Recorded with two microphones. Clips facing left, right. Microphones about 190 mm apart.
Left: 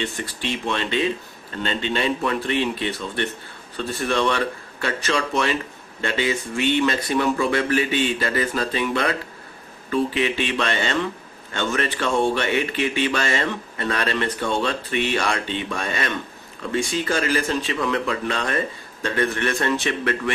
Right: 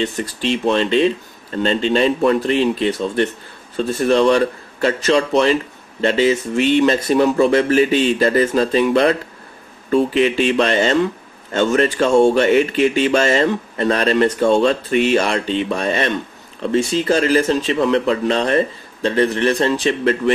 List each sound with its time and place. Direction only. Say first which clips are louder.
0.0 s speech: right 7 dB; 40° right (ahead or behind)